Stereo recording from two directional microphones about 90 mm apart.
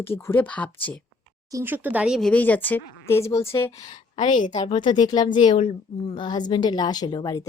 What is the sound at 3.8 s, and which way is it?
A woman's voice, 50° left (ahead or behind).